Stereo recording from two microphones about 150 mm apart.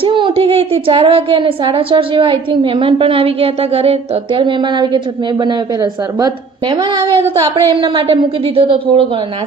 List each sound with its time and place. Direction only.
0.0 s a woman's voice: 35° right (ahead or behind)